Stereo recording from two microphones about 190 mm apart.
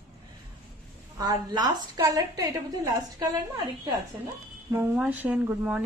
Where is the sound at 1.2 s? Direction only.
20° right (ahead or behind).